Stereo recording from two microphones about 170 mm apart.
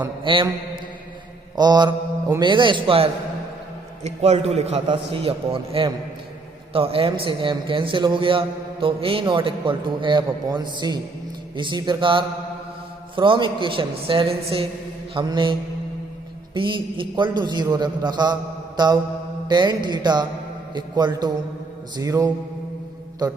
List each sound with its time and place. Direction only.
0.3 s a man's voice: 30° right (ahead or behind)
1.5 s a man's voice: 25° right (ahead or behind)
16.6 s a man's voice: 30° right (ahead or behind)